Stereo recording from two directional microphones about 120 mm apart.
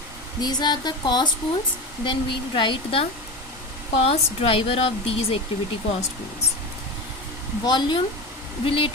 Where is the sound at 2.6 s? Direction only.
45° left (ahead or behind).